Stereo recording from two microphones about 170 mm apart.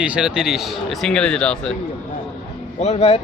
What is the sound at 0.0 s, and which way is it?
A man's voice, 5° right (ahead or behind).